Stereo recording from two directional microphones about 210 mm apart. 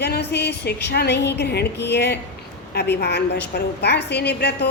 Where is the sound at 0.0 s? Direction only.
50° left (ahead or behind).